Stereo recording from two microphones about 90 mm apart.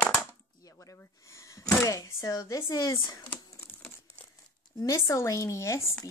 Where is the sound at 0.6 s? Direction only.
35° left (ahead or behind).